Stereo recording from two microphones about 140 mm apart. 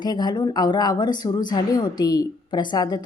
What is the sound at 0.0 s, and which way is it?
A woman's voice, 30° left (ahead or behind).